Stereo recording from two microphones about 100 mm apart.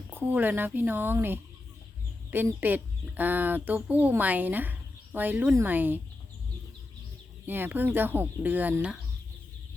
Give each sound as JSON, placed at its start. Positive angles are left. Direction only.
{"t": 0.1, "sound": "a woman's voice", "side_deg": -20}
{"t": 7.4, "sound": "speech", "side_deg": -20}